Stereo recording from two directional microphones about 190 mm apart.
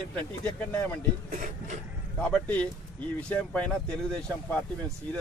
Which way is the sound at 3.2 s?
5° left (ahead or behind).